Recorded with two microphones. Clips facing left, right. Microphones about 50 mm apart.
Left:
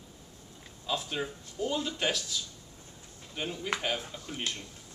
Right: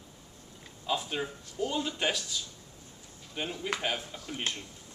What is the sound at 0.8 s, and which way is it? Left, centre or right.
A man's voice, centre.